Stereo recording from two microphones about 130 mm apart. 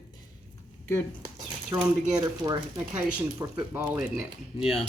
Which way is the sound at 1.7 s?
20° right (ahead or behind).